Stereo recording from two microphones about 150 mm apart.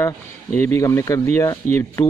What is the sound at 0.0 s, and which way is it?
Speech, 15° left (ahead or behind).